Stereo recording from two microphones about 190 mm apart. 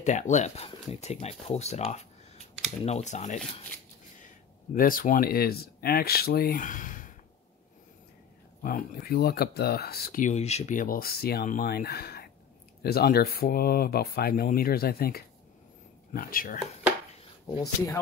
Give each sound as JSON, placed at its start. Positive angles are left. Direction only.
{"t": 0.0, "sound": "speech", "side_deg": 40}
{"t": 4.7, "sound": "speech", "side_deg": 50}
{"t": 8.6, "sound": "speech", "side_deg": 50}